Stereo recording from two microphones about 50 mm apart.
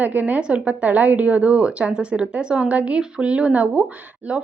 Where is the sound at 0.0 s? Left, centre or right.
Right.